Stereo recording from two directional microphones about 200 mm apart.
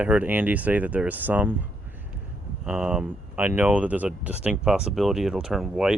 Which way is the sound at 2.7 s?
5° right (ahead or behind).